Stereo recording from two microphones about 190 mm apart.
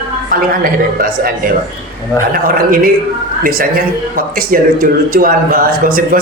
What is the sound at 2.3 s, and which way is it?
Speech, 50° right (ahead or behind).